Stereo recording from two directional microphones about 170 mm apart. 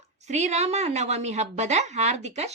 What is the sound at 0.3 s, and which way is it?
A woman's voice, 40° right (ahead or behind).